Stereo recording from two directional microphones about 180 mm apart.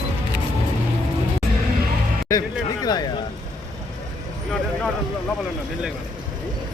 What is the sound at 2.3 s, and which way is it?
Speech, 15° left (ahead or behind).